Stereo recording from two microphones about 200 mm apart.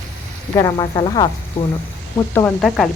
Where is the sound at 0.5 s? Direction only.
20° left (ahead or behind).